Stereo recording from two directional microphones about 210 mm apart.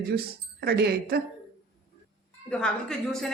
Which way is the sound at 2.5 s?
5° left (ahead or behind).